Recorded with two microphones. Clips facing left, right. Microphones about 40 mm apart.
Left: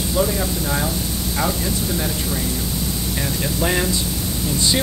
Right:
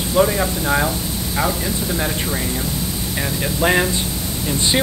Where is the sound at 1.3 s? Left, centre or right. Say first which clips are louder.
Right 2 dB; centre.